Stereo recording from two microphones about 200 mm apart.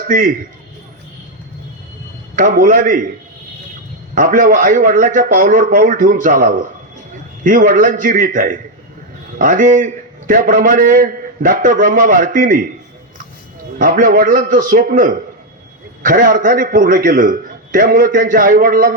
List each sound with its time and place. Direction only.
0.1 s a man's voice: 45° right (ahead or behind)
2.3 s a man's voice: 40° right (ahead or behind)
4.1 s a man's voice: 40° right (ahead or behind)
13.7 s a man's voice: 45° right (ahead or behind)